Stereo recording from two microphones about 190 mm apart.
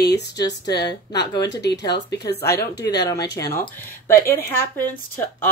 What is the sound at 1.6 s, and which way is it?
Speech, 65° left (ahead or behind).